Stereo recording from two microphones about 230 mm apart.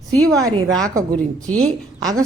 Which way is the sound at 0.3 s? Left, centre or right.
Centre.